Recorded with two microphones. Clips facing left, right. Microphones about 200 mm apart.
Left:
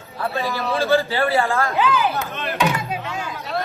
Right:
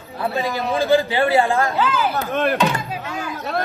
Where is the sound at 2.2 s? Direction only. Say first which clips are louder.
Right 8 dB; 50° right (ahead or behind).